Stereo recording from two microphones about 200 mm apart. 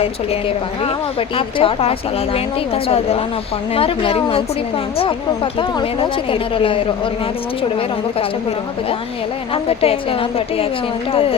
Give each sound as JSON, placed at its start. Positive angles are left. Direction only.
{"t": 0.0, "sound": "speech", "side_deg": 30}